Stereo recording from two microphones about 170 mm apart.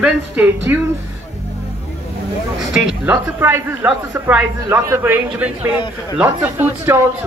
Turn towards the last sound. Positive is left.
turn(degrees=-10)  # may be behind; listen again after turning